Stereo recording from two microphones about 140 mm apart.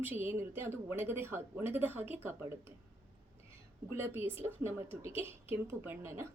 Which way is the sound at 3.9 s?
15° right (ahead or behind).